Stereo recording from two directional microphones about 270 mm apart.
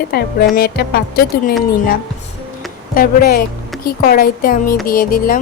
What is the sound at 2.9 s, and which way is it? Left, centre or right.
Speech, left.